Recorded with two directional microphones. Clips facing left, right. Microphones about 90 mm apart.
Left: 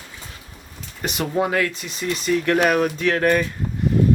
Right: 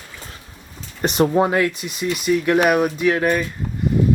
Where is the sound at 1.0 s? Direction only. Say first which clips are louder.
Right 6 dB; 30° right (ahead or behind); by 3.5 s 5° right (ahead or behind).